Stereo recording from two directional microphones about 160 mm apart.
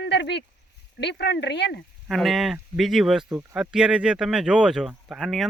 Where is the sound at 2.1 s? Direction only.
Centre (ahead or behind).